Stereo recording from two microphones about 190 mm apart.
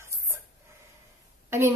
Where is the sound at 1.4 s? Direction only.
15° right (ahead or behind).